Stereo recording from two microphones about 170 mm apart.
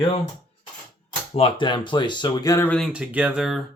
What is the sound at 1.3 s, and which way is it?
Speech, 30° left (ahead or behind).